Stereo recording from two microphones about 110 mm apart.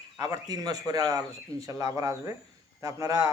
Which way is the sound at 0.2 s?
35° right (ahead or behind).